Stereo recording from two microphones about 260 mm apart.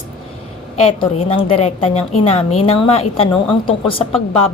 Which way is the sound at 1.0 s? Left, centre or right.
Left.